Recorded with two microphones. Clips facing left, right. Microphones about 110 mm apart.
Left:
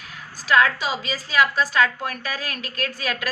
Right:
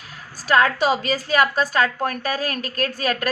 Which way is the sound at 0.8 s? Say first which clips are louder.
Right 7 dB; 55° right (ahead or behind).